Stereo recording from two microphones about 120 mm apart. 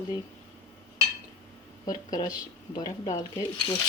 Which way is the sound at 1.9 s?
30° left (ahead or behind).